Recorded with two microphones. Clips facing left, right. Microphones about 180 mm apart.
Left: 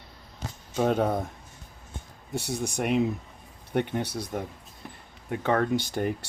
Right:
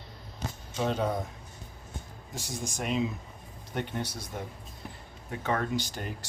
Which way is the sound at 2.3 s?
65° left (ahead or behind).